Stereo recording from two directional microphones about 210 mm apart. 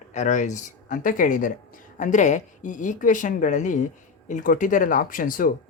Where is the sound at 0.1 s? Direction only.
35° left (ahead or behind).